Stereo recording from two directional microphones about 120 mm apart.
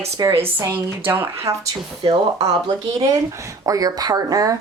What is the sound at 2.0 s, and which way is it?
Speech, 35° right (ahead or behind).